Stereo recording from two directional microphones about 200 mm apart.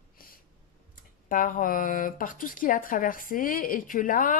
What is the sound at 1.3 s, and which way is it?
Speech, 40° left (ahead or behind).